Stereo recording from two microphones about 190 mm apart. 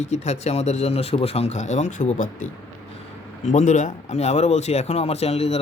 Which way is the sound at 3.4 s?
40° left (ahead or behind).